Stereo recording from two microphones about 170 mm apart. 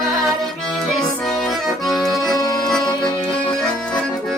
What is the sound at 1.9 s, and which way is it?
Accordion, centre (ahead or behind).